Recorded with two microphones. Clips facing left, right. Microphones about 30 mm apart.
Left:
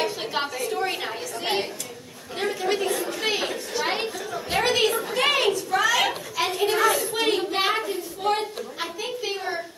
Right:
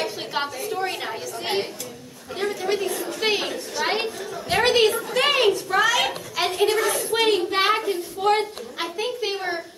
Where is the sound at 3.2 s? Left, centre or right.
Centre.